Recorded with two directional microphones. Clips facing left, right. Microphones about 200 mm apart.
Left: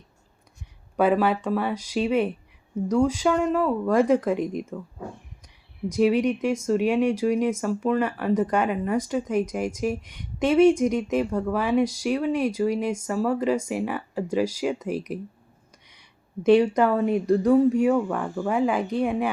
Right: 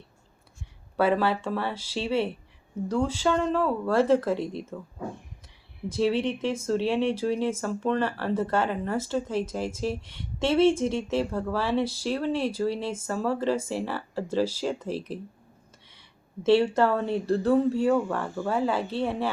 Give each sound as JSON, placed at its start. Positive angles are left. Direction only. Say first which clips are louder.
{"t": 0.9, "sound": "speech", "louder": "left 3 dB", "side_deg": 15}
{"t": 5.9, "sound": "speech", "louder": "left 4 dB", "side_deg": 15}
{"t": 16.5, "sound": "speech", "louder": "left 3 dB", "side_deg": 15}